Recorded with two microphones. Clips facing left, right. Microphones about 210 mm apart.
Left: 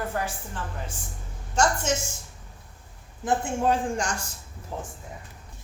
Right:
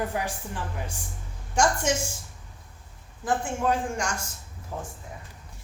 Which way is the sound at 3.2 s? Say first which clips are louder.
Left 2 dB; 30° left (ahead or behind).